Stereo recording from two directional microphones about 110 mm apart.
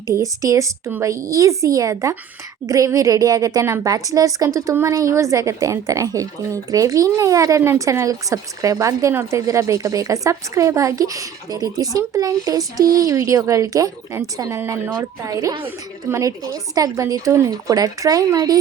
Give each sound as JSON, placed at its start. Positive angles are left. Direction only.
{"t": 0.1, "sound": "a woman's voice", "side_deg": -30}